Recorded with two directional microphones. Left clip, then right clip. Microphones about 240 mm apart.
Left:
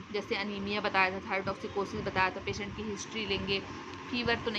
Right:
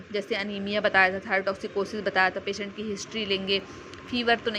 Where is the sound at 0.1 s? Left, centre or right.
Centre.